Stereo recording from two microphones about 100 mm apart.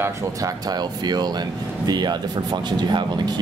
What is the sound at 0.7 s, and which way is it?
Speech, 45° right (ahead or behind).